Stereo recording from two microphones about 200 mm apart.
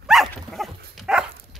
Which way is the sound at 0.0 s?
Centre (ahead or behind).